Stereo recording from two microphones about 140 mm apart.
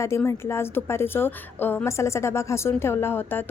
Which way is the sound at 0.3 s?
20° left (ahead or behind).